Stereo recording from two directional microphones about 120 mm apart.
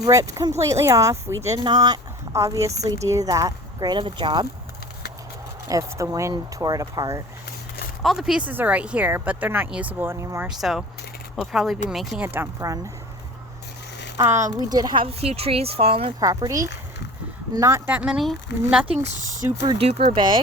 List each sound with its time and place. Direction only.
0.0 s speech: 25° right (ahead or behind)
1.6 s speech: 35° right (ahead or behind)
5.6 s speech: 30° right (ahead or behind)
8.0 s speech: 5° right (ahead or behind); by 10.4 s 25° right (ahead or behind)
10.5 s speech: 5° right (ahead or behind)
12.2 s speech: 15° right (ahead or behind)
14.2 s speech: 25° right (ahead or behind)
15.0 s speech: 55° right (ahead or behind)
16.2 s speech: 30° right (ahead or behind)
17.8 s speech: 10° right (ahead or behind)
19.0 s speech: 85° right
19.8 s speech: 55° right (ahead or behind)
20.1 s speech: 45° right (ahead or behind)